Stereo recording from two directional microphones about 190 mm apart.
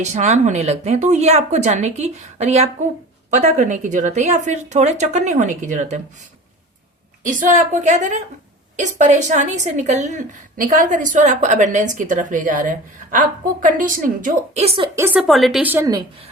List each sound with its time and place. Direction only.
0.0 s a woman's voice: 40° right (ahead or behind)
7.3 s a woman's voice: 45° right (ahead or behind)
14.9 s a woman's voice: 10° right (ahead or behind)